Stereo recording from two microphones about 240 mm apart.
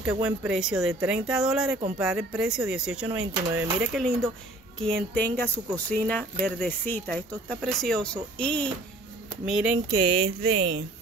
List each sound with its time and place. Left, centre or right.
0.0 s speech: centre
5.1 s speech: right
5.4 s speech: centre
9.9 s speech: right